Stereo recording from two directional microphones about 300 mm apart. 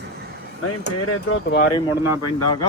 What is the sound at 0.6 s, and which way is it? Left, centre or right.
Speech, left.